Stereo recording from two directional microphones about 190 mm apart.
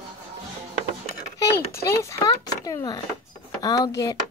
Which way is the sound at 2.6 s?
20° left (ahead or behind).